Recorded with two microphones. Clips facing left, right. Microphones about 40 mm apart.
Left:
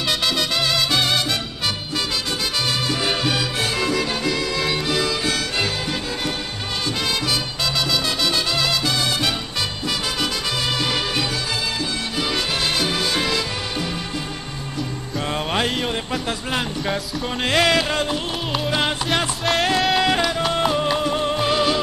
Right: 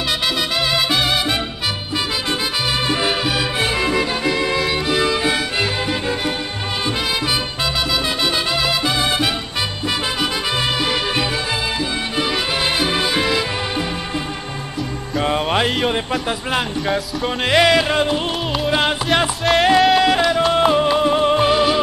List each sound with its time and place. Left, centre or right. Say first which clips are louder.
0.6 s music: right 3 dB; centre
3.1 s music: right 2 dB; centre
7.9 s music: right 2 dB; centre
10.8 s music: right 3 dB; centre
15.1 s music: right 5 dB; centre
20.5 s music: right 5 dB; right
21.5 s music: right 4 dB; centre